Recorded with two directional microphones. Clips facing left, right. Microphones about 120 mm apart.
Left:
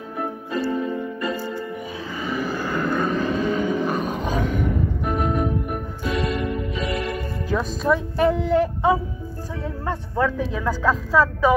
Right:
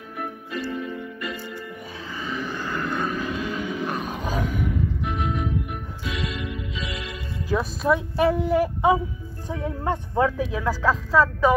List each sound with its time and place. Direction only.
0.2 s music: 35° left (ahead or behind)
2.1 s vehicle: 5° left (ahead or behind)
3.1 s vehicle: 40° left (ahead or behind)
3.8 s roar: centre (ahead or behind)
4.6 s music: 45° left (ahead or behind)
7.4 s speech: 5° right (ahead or behind)
10.6 s speech: centre (ahead or behind)